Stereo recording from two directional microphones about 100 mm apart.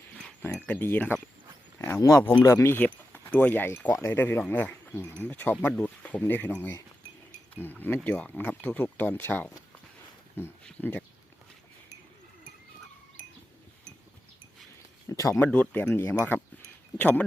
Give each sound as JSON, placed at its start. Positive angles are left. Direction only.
{"t": 0.6, "sound": "speech", "side_deg": 15}
{"t": 10.6, "sound": "speech", "side_deg": 10}
{"t": 15.1, "sound": "a sound", "side_deg": 30}
{"t": 15.7, "sound": "speech", "side_deg": 20}